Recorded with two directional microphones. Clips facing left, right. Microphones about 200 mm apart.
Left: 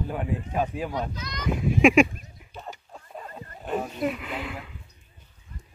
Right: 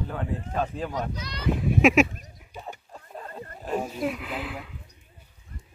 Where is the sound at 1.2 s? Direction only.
30° right (ahead or behind).